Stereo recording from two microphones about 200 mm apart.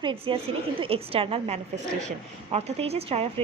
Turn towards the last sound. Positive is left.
turn(degrees=-30)  # may be behind; listen again after turning